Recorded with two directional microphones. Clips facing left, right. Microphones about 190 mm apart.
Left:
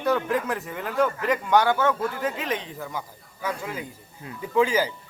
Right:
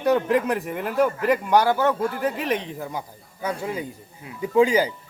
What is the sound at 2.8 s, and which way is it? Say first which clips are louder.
Speech: right 2 dB; 20° right (ahead or behind).